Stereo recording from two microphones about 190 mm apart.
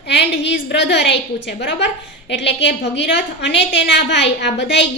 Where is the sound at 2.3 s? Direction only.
70° left (ahead or behind).